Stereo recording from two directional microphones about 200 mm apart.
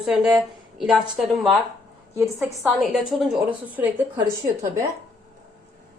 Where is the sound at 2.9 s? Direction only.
Centre (ahead or behind).